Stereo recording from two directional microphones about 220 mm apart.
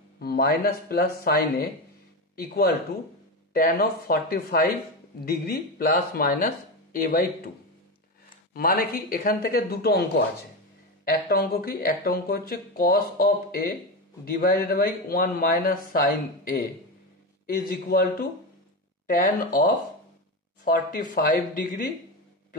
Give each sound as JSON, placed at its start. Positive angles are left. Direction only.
{"t": 0.2, "sound": "speech", "side_deg": 45}
{"t": 8.5, "sound": "speech", "side_deg": 40}
{"t": 11.2, "sound": "speech", "side_deg": 45}
{"t": 19.0, "sound": "speech", "side_deg": 35}